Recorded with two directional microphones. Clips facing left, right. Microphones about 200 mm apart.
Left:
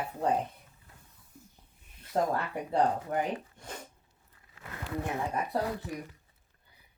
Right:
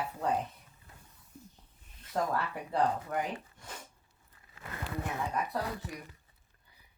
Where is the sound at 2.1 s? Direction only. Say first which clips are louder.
Left 3 dB; 30° left (ahead or behind).